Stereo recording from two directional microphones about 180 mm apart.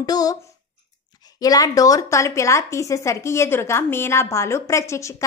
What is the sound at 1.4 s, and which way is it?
A woman's voice, 20° left (ahead or behind).